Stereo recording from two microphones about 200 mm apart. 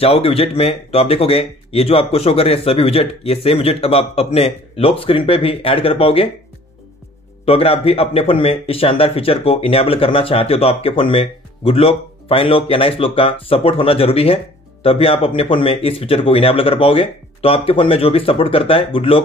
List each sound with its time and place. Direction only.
0.0 s a man's voice: 30° left (ahead or behind)
7.4 s a man's voice: 30° left (ahead or behind)